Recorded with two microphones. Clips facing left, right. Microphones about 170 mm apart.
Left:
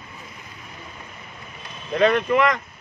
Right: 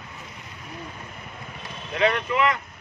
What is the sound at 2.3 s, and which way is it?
Speech, 40° left (ahead or behind).